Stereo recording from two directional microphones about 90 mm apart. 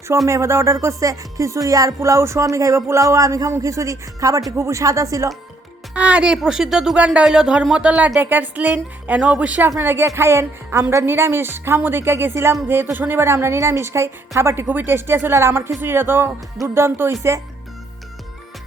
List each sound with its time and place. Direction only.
0.3 s music: 35° right (ahead or behind)
5.9 s a woman's voice: 15° right (ahead or behind); by 17.4 s 35° right (ahead or behind)